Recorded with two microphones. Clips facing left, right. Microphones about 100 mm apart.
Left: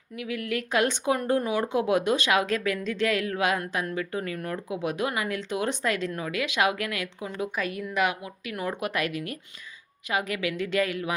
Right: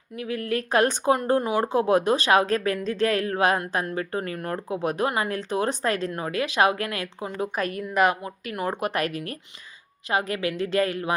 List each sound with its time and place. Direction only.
0.2 s speech: 40° right (ahead or behind)